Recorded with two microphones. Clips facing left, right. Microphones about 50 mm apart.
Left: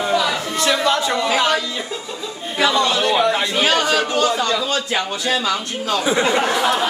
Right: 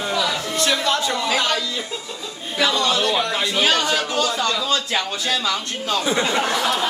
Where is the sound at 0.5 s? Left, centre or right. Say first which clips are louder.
Left 3 dB; left.